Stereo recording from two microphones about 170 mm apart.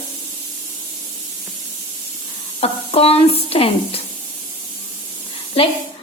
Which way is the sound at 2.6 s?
35° left (ahead or behind).